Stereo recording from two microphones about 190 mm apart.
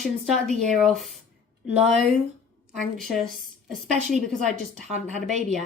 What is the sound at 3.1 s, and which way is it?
A woman's voice, centre (ahead or behind).